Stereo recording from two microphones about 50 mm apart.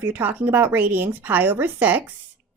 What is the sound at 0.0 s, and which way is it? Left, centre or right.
A woman's voice, right.